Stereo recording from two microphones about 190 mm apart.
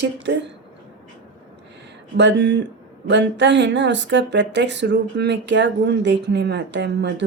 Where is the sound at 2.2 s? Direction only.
70° right (ahead or behind).